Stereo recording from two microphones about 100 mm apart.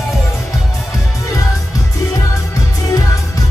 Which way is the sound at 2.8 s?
35° left (ahead or behind).